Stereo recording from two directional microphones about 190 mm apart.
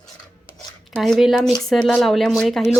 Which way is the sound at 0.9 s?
Centre (ahead or behind).